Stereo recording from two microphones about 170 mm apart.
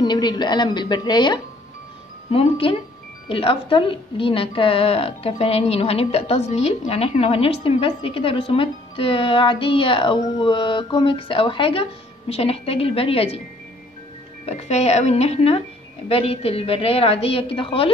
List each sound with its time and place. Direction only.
0.0 s a woman's voice: 25° left (ahead or behind)
14.4 s a woman's voice: 40° left (ahead or behind)